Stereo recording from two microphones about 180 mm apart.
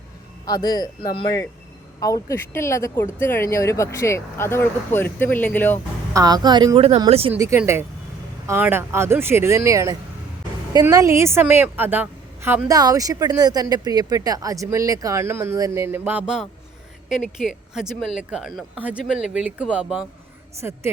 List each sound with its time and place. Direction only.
0.4 s speech: 20° left (ahead or behind)
6.1 s speech: 20° right (ahead or behind)
7.3 s a woman's voice: 15° right (ahead or behind)
20.6 s a woman's voice: 15° right (ahead or behind)